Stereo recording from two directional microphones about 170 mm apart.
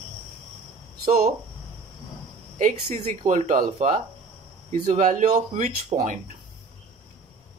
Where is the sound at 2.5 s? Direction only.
50° right (ahead or behind).